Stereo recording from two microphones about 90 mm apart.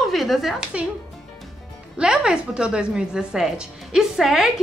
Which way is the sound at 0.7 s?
10° right (ahead or behind).